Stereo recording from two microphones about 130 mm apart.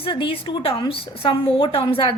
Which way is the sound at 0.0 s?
45° left (ahead or behind).